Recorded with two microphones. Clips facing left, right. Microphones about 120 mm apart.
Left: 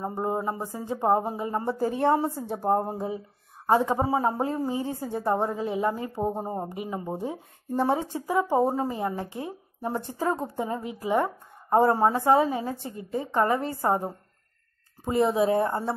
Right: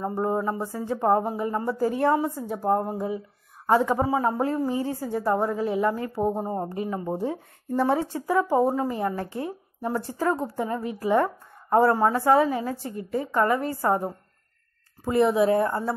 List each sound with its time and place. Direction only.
0.0 s a woman's voice: 20° left (ahead or behind)